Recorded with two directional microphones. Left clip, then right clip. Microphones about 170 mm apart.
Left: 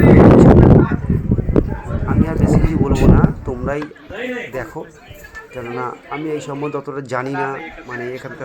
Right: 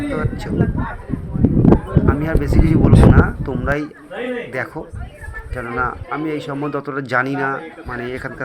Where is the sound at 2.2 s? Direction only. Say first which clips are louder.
Left 1 dB; 5° left (ahead or behind).